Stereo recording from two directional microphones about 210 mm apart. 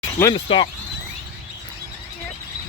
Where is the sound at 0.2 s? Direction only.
20° left (ahead or behind).